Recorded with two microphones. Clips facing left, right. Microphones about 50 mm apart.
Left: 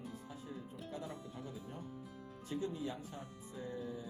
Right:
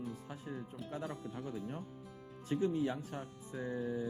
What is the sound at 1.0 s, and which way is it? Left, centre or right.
Speech, right.